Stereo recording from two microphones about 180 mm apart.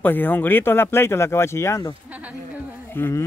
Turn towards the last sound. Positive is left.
turn(degrees=15)  # may be behind; listen again after turning